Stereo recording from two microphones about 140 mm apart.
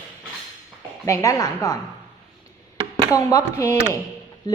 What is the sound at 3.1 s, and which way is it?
Speech, 25° left (ahead or behind).